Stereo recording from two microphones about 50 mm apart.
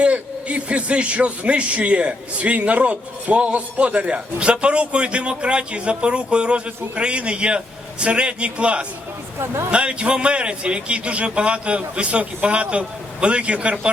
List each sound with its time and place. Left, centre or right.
0.0 s a man's voice: right